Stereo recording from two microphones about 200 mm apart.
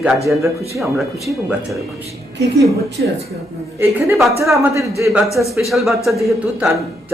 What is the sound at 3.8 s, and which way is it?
A man's voice, 15° right (ahead or behind).